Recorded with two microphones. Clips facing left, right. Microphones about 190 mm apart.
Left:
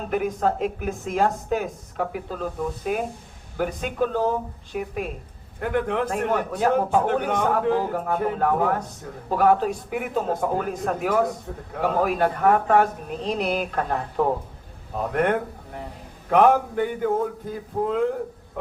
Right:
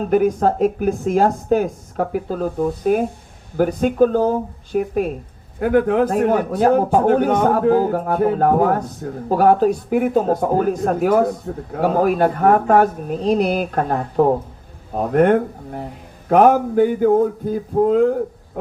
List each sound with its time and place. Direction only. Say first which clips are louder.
0.1 s a man's voice: right 7 dB; 40° right (ahead or behind)